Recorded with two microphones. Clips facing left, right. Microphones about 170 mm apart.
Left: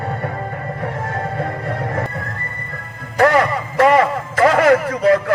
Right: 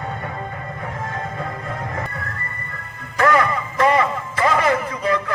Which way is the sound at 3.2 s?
60° left (ahead or behind).